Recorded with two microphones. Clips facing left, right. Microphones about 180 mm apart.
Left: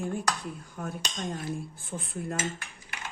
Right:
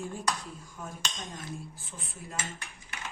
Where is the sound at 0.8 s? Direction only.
60° left (ahead or behind).